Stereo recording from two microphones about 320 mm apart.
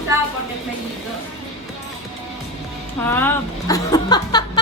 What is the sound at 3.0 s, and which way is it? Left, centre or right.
Speech, centre.